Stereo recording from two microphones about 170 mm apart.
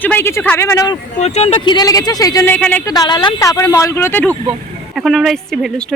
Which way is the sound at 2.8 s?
20° left (ahead or behind).